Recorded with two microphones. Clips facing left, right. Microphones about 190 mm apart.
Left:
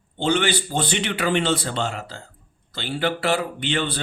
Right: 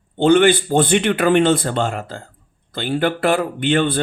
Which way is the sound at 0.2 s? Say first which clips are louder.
Right 9 dB; 55° right (ahead or behind).